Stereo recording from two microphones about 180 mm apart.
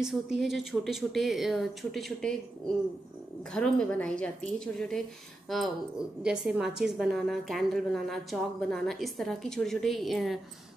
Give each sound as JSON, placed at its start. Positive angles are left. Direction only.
{"t": 0.0, "sound": "a woman's voice", "side_deg": 0}
{"t": 3.5, "sound": "a woman's voice", "side_deg": 5}